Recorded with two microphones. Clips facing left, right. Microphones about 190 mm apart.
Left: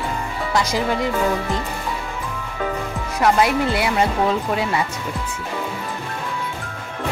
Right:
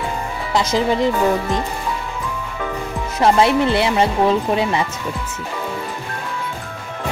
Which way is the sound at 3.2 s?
25° right (ahead or behind).